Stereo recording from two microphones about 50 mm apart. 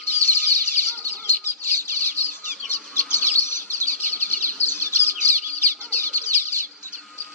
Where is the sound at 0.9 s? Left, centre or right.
Left.